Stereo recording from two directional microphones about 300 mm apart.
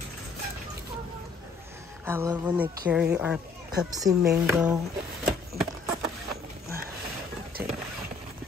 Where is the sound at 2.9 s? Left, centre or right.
Centre.